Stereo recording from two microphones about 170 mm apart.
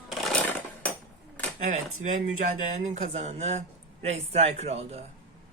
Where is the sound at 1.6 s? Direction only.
45° right (ahead or behind).